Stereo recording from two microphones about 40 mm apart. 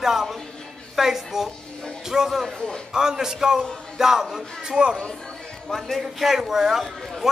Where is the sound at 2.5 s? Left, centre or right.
Left.